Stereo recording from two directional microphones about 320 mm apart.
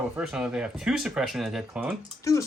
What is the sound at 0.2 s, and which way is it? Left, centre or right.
Speech, centre.